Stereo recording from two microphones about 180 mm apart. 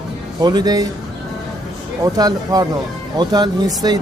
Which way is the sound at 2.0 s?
20° right (ahead or behind).